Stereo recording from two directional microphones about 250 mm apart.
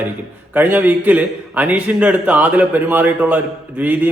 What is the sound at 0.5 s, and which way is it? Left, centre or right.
A man's voice, centre.